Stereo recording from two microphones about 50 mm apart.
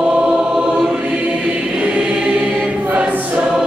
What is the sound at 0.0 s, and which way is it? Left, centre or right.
Choir, centre.